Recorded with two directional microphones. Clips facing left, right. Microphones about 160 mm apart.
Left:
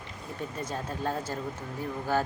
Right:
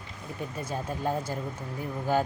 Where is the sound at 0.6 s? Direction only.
10° right (ahead or behind).